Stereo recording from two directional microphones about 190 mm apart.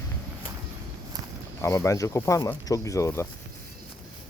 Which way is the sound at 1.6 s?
15° left (ahead or behind).